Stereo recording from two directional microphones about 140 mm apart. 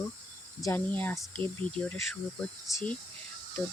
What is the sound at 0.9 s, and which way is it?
Speech, 10° left (ahead or behind).